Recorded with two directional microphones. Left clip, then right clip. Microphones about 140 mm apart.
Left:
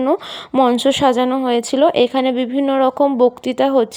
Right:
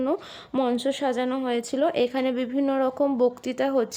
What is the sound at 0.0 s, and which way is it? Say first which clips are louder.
Speech: left 9 dB; 40° left (ahead or behind).